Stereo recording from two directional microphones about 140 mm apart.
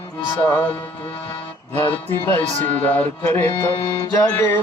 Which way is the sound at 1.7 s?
15° left (ahead or behind).